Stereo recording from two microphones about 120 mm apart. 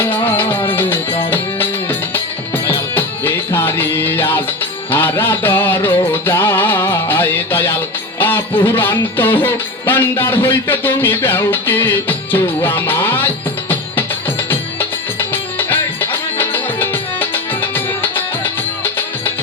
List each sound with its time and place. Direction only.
0.0 s music: 15° left (ahead or behind)